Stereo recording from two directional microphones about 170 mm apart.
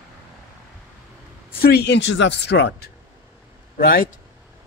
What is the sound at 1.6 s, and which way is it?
Speech, 70° left (ahead or behind).